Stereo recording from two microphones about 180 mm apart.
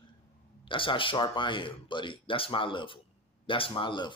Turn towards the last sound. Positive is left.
turn(degrees=25)  # may be behind; listen again after turning